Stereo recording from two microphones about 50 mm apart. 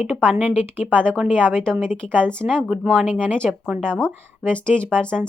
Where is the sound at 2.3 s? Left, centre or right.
Centre.